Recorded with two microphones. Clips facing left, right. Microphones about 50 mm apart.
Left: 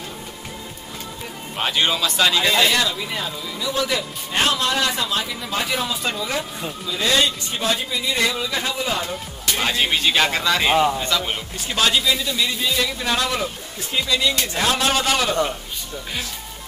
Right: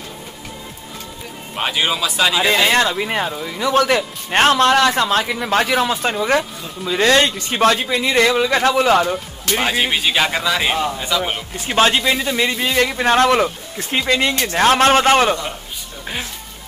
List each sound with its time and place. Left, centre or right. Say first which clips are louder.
1.5 s speech: right 1 dB; centre
2.7 s speech: right 5 dB; right
6.0 s speech: right 7 dB; right
6.8 s speech: right 6 dB; right
9.7 s speech: even; centre
11.6 s a man's voice: right 5 dB; right